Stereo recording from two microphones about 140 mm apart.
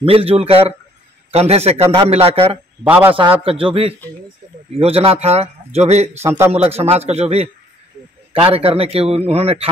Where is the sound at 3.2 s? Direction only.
40° right (ahead or behind).